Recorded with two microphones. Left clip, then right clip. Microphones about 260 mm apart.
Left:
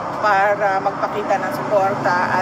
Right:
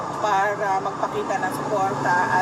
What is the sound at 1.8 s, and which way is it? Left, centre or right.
Speech, centre.